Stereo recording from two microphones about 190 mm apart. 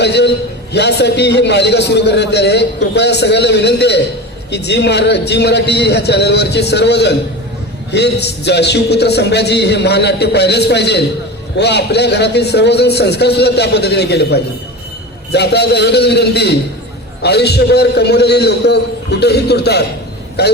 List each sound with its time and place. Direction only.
0.0 s a man's voice: 60° left (ahead or behind)